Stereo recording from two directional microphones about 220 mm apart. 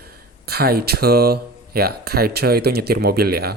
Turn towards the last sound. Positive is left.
turn(degrees=-45)  # may be behind; listen again after turning